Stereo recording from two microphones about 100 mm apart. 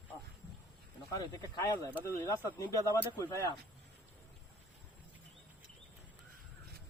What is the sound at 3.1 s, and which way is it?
Speech, 35° left (ahead or behind).